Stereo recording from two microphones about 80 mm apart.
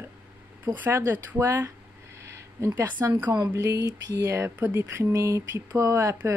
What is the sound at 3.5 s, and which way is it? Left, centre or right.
Speech, right.